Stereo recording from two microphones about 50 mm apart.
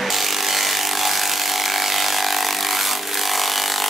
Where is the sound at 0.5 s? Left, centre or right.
Centre.